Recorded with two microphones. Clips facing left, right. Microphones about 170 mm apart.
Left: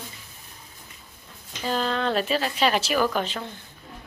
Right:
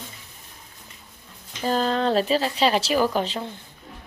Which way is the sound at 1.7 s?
35° right (ahead or behind).